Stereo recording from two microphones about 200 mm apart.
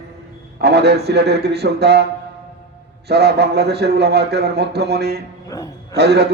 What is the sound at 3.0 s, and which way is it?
A man's voice, 55° right (ahead or behind).